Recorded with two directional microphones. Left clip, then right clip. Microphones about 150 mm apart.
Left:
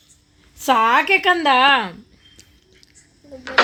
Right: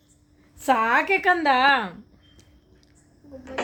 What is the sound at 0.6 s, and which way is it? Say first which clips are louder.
Speech: left 5 dB; 35° left (ahead or behind).